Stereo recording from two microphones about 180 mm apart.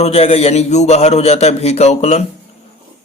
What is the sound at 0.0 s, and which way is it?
A man's voice, 35° left (ahead or behind).